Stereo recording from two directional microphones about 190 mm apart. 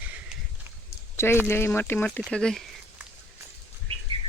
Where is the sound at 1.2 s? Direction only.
15° left (ahead or behind).